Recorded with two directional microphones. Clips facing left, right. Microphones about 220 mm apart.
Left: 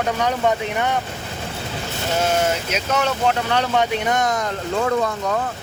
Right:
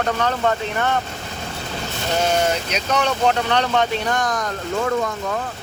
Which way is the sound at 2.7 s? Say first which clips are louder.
Even; 5° left (ahead or behind).